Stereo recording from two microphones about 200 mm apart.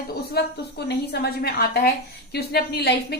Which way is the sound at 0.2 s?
55° left (ahead or behind).